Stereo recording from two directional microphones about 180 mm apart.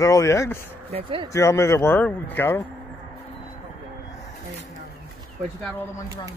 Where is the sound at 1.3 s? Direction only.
15° left (ahead or behind).